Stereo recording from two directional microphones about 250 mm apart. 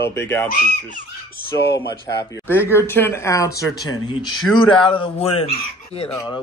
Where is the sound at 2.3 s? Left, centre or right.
Centre.